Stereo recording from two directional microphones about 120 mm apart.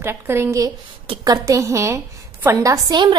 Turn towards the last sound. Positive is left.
turn(degrees=-40)  # may be behind; listen again after turning